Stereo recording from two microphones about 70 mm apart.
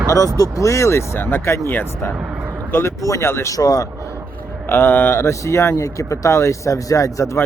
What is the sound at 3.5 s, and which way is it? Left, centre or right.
Speech, left.